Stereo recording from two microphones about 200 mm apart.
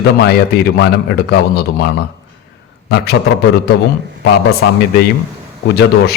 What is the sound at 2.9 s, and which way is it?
Speech, 55° left (ahead or behind).